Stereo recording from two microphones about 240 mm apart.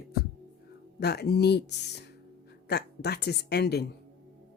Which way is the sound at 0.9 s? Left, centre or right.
Left.